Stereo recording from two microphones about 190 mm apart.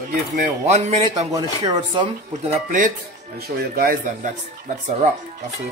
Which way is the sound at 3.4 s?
55° right (ahead or behind).